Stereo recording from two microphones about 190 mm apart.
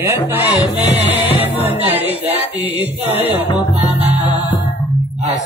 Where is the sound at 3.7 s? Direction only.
35° right (ahead or behind).